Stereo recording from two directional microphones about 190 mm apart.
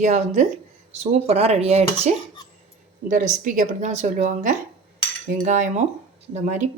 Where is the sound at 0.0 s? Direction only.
40° right (ahead or behind).